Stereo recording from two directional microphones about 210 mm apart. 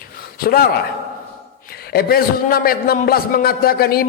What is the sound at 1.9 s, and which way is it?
A man's voice, 45° left (ahead or behind).